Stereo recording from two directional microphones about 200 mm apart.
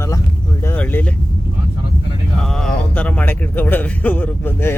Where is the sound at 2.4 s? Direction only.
Centre (ahead or behind).